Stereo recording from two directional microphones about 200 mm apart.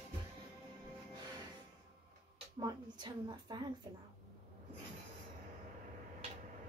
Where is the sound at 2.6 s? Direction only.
20° right (ahead or behind).